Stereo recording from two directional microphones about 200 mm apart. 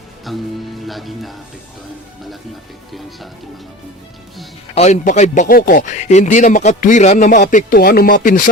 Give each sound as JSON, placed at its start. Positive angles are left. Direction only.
{"t": 0.3, "sound": "music", "side_deg": 0}
{"t": 0.9, "sound": "speech", "side_deg": 0}
{"t": 4.7, "sound": "speech", "side_deg": 35}